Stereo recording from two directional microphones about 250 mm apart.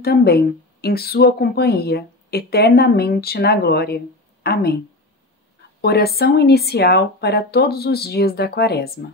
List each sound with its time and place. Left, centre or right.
0.0 s a woman's voice: left
5.8 s a woman's voice: left